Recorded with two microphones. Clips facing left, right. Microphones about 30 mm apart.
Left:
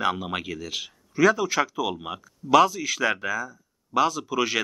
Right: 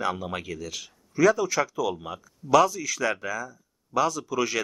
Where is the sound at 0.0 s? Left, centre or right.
Left.